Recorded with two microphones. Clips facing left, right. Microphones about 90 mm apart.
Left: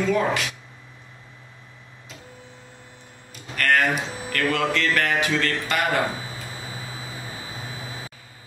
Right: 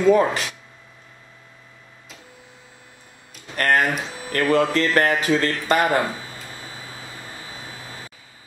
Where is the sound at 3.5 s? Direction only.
35° right (ahead or behind).